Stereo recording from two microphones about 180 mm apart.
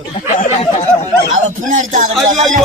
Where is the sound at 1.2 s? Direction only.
45° right (ahead or behind).